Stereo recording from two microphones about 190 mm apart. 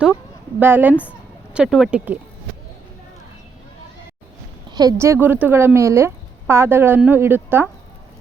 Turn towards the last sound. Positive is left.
turn(degrees=-10)  # may be behind; listen again after turning